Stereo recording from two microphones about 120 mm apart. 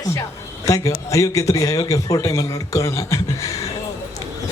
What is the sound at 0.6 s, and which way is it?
A man's voice, 25° left (ahead or behind).